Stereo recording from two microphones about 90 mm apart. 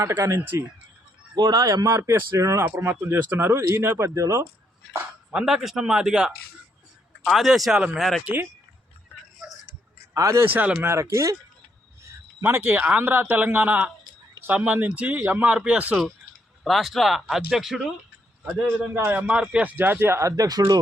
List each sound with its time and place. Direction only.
0.1 s speech: 30° right (ahead or behind)
1.4 s speech: 45° right (ahead or behind)
5.3 s speech: 10° right (ahead or behind)
8.2 s speech: 20° right (ahead or behind)
10.2 s speech: 40° right (ahead or behind)
10.4 s speech: 20° right (ahead or behind)
10.8 s a man's voice: 30° right (ahead or behind); by 16.0 s 15° right (ahead or behind)
16.6 s speech: centre (ahead or behind)
18.9 s speech: 25° right (ahead or behind)
19.3 s speech: 10° right (ahead or behind)
19.7 s speech: 25° right (ahead or behind); by 20.7 s 40° right (ahead or behind)